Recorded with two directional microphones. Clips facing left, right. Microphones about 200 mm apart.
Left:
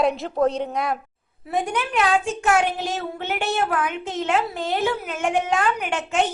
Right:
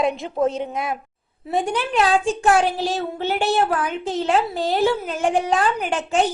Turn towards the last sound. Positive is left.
turn(degrees=-35)  # may be behind; listen again after turning